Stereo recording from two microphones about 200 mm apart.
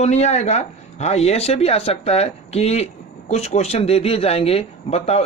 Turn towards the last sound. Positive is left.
turn(degrees=30)  # may be behind; listen again after turning